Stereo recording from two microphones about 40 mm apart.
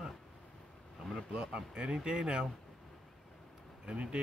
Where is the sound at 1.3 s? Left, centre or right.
Right.